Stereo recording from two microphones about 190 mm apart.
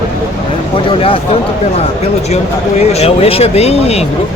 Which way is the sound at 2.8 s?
35° left (ahead or behind).